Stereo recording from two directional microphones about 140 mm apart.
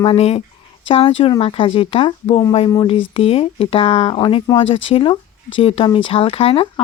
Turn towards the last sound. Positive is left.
turn(degrees=40)  # may be behind; listen again after turning